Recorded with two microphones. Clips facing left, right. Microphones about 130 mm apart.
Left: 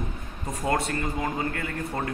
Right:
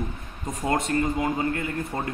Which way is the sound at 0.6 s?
25° right (ahead or behind).